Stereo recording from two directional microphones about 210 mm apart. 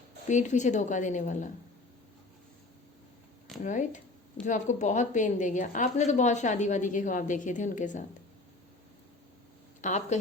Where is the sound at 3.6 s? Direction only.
35° left (ahead or behind).